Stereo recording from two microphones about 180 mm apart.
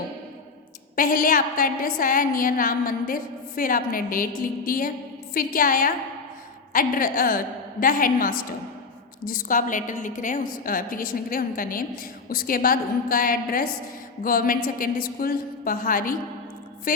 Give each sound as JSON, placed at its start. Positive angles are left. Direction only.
{"t": 0.9, "sound": "a woman's voice", "side_deg": 50}